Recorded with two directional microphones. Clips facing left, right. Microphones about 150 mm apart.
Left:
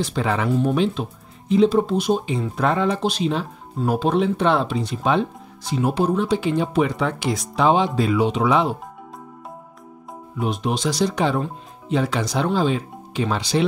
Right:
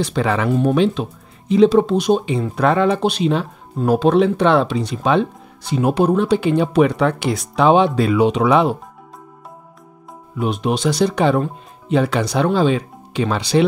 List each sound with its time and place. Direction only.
0.0 s speech: 75° right (ahead or behind)
1.6 s speech: 85° right; by 8.7 s 65° right (ahead or behind)
10.4 s speech: 65° right (ahead or behind)